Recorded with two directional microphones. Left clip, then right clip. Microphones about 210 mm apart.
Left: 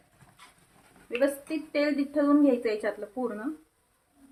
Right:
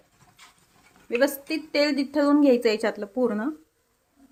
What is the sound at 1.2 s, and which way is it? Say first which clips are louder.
Speech: right 4 dB; 45° right (ahead or behind).